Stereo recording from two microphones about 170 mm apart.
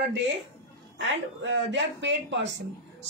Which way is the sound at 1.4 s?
90° right.